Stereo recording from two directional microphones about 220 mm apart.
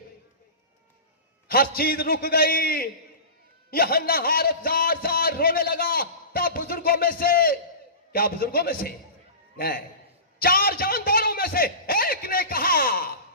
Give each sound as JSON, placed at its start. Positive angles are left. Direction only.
{"t": 1.5, "sound": "a man's voice", "side_deg": 40}